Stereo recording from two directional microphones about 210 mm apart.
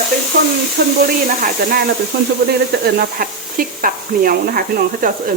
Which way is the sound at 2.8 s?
45° right (ahead or behind).